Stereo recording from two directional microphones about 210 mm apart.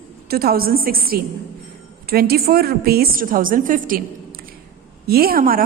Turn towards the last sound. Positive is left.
turn(degrees=-45)  # may be behind; listen again after turning